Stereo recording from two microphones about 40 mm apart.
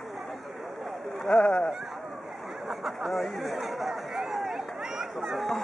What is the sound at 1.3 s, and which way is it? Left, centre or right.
Speech, left.